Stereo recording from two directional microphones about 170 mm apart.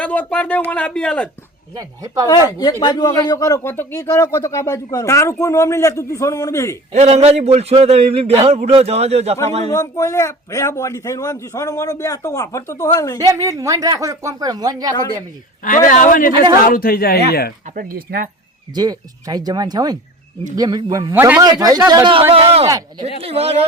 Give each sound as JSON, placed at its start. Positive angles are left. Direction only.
{"t": 0.0, "sound": "speech", "side_deg": 10}
{"t": 1.7, "sound": "speech", "side_deg": -20}
{"t": 2.2, "sound": "a man's voice", "side_deg": 20}
{"t": 6.9, "sound": "a man's voice", "side_deg": -40}
{"t": 9.6, "sound": "a man's voice", "side_deg": 20}
{"t": 13.1, "sound": "speech", "side_deg": -20}
{"t": 15.9, "sound": "a man's voice", "side_deg": 50}
{"t": 17.7, "sound": "speech", "side_deg": -60}
{"t": 18.7, "sound": "speech", "side_deg": -20}
{"t": 23.2, "sound": "a man's voice", "side_deg": -35}